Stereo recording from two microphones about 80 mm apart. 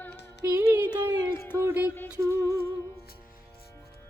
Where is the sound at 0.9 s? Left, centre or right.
Left.